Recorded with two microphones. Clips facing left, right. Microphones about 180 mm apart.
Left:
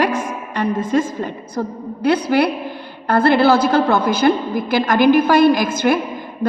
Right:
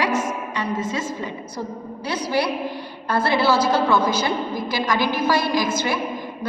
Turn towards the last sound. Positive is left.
turn(degrees=55)  # may be behind; listen again after turning